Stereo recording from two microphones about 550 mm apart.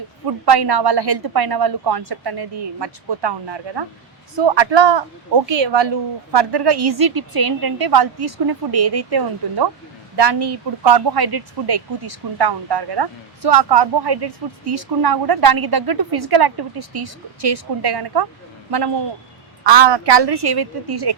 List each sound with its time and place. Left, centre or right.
0.3 s speech: right
19.6 s speech: right